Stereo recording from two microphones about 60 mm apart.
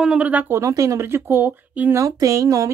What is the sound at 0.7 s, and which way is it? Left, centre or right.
Speech, right.